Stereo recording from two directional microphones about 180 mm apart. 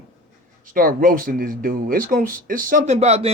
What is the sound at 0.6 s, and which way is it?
Speech, 50° right (ahead or behind).